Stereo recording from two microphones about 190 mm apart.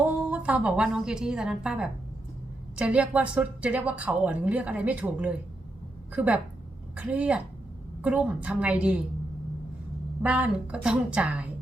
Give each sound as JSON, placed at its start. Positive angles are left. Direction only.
{"t": 0.3, "sound": "a woman's voice", "side_deg": -5}
{"t": 10.2, "sound": "a woman's voice", "side_deg": -5}